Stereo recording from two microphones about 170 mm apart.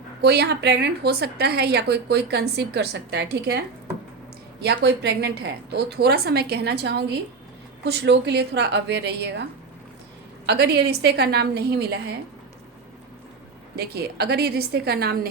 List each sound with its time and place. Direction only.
0.2 s a woman's voice: 75° right (ahead or behind)
4.6 s a woman's voice: 80° right
13.7 s a woman's voice: 70° right (ahead or behind)